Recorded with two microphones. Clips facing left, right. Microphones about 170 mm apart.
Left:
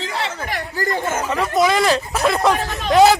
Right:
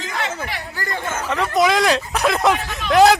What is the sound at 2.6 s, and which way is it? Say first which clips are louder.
Speech: left 4 dB; 40° left (ahead or behind).